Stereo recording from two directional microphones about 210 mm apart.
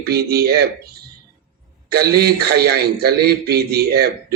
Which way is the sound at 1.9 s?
50° right (ahead or behind).